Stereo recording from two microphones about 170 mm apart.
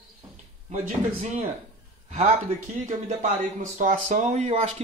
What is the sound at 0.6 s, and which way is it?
Speech, 45° right (ahead or behind).